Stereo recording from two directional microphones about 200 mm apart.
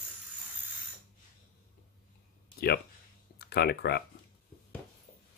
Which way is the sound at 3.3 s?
55° left (ahead or behind).